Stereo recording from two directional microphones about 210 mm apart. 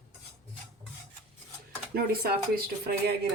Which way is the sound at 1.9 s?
50° right (ahead or behind).